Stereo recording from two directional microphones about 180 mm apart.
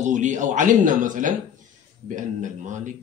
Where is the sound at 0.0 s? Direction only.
45° right (ahead or behind).